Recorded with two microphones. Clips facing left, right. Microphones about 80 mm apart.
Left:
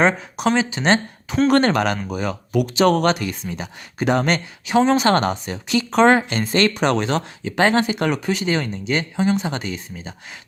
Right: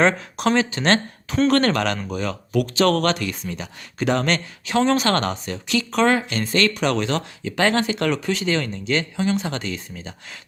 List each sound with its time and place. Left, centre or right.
0.0 s speech: centre